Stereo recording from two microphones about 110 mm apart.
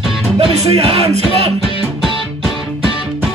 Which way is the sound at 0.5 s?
65° right (ahead or behind).